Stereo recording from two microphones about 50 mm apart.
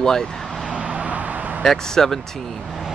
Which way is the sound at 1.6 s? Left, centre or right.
Centre.